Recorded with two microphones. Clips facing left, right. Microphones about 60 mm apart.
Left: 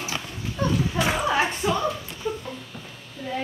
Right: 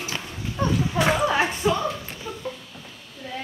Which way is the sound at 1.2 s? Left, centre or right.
Centre.